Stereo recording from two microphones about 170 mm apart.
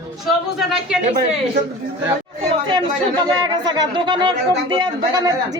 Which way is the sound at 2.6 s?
25° right (ahead or behind).